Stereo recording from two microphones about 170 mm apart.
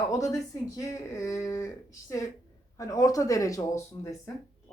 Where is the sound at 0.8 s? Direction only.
20° left (ahead or behind).